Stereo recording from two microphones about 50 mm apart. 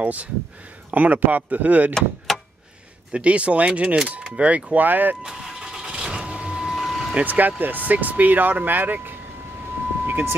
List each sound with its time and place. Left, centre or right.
0.0 s speech: right
2.0 s vehicle: centre
3.1 s speech: right
4.7 s speech: right
5.2 s vehicle: centre
6.7 s vehicle: centre
7.2 s speech: right